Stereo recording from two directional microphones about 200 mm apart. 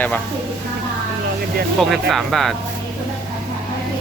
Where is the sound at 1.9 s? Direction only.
Centre (ahead or behind).